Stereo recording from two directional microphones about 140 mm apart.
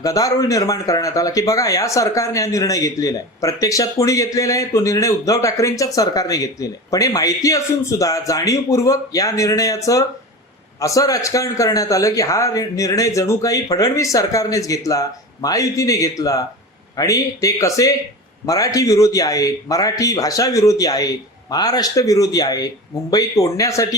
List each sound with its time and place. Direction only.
0.0 s speech: 25° left (ahead or behind)